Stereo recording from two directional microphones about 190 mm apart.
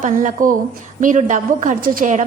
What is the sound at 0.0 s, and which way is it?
A woman's voice, 40° right (ahead or behind).